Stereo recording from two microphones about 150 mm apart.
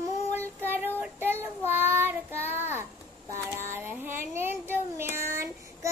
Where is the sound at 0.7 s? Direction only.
15° right (ahead or behind).